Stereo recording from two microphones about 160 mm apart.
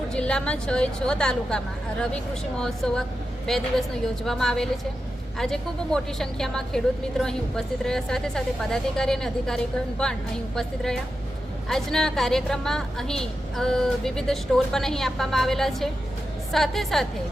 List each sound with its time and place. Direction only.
0.1 s a woman's voice: 5° left (ahead or behind)